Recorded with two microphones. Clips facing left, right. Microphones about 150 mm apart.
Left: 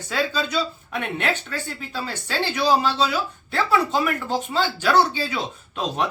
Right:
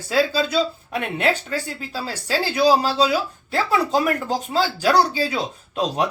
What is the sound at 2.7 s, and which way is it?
Speech, 35° right (ahead or behind).